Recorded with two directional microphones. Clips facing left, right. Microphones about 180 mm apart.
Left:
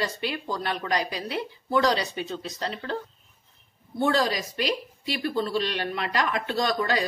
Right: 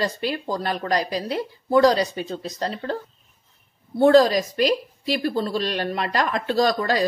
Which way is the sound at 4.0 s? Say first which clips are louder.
Right 9 dB; 45° right (ahead or behind).